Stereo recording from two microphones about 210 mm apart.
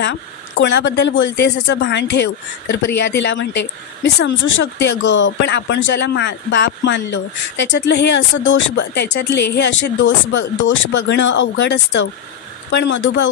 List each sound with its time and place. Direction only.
0.6 s speech: 60° left (ahead or behind)